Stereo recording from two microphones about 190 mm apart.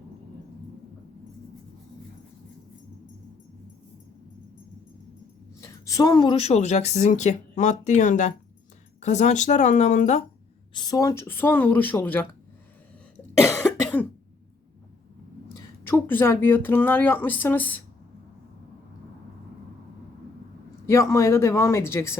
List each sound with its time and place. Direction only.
5.5 s a woman's voice: 15° left (ahead or behind); by 10.2 s 40° left (ahead or behind)
10.8 s speech: 20° left (ahead or behind)
15.8 s speech: 10° left (ahead or behind)
20.8 s speech: 15° left (ahead or behind)